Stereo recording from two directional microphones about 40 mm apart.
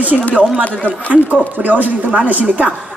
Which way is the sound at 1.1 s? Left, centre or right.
Right.